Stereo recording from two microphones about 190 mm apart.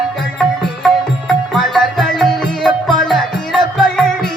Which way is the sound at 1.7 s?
Centre (ahead or behind).